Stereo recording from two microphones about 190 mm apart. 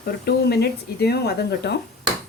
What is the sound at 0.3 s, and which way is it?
Speech, 60° left (ahead or behind).